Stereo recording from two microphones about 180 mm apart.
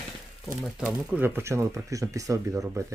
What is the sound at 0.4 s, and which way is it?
Speech, centre (ahead or behind).